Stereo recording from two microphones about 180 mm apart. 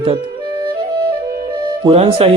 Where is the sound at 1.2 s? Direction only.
20° right (ahead or behind).